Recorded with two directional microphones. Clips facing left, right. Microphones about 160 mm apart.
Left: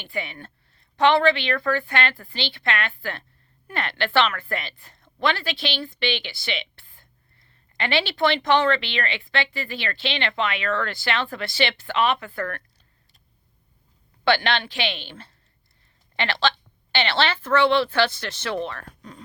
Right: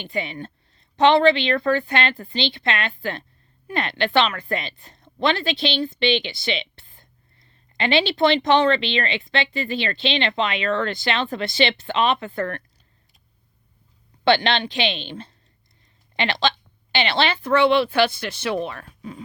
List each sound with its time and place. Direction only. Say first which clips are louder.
0.0 s a woman's voice: right 4 dB; 20° right (ahead or behind)
14.3 s a woman's voice: right 3 dB; 20° right (ahead or behind)